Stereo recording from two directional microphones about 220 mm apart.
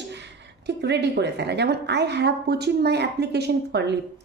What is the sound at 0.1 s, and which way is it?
A woman's voice, 50° right (ahead or behind).